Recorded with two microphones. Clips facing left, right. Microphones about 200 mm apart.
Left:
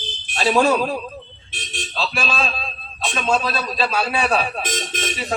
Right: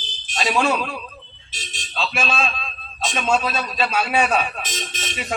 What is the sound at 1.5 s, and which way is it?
Speech, 60° left (ahead or behind).